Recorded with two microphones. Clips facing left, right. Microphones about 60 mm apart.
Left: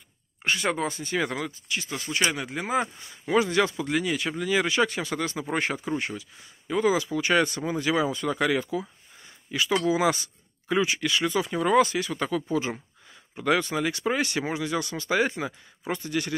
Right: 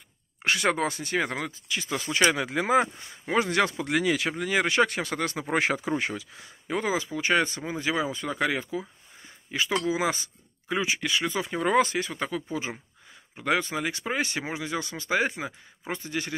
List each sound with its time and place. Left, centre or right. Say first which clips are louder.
0.4 s speech: right 1 dB; right
1.1 s speech: left 2 dB; right
2.3 s speech: right 4 dB; right
3.3 s speech: left 2 dB; right
3.9 s speech: right 2 dB; right
4.3 s speech: even; right
5.5 s speech: right 4 dB; right
6.7 s speech: left 4 dB; right
12.1 s speech: left 4 dB; centre